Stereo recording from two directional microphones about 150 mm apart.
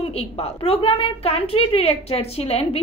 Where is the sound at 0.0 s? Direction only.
45° left (ahead or behind).